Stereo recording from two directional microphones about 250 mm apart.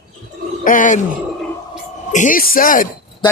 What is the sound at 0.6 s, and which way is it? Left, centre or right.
Speech, left.